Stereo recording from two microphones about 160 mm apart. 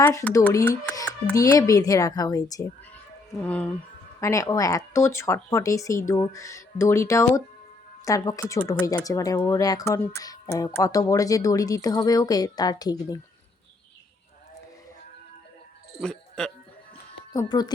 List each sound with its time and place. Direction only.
0.0 s speech: 20° left (ahead or behind)
3.4 s speech: 10° left (ahead or behind)
16.0 s a sound: 5° left (ahead or behind)
17.3 s speech: 25° left (ahead or behind)